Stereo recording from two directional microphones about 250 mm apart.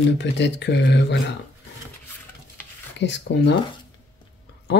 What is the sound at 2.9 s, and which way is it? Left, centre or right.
Speech, left.